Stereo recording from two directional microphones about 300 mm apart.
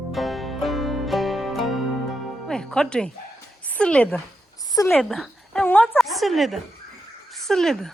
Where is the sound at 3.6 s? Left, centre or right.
Centre.